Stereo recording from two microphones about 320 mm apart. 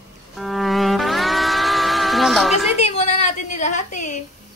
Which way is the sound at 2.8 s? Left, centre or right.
Centre.